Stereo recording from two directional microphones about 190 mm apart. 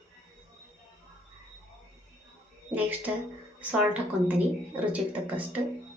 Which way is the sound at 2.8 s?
10° right (ahead or behind).